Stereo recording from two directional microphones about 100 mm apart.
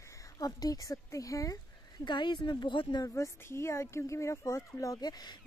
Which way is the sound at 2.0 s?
50° left (ahead or behind).